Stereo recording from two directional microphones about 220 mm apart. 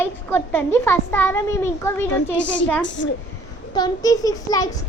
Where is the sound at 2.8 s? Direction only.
55° left (ahead or behind).